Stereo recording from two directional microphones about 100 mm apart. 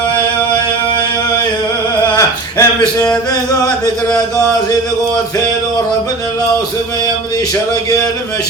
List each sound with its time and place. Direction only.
2.1 s a man's voice: 35° left (ahead or behind)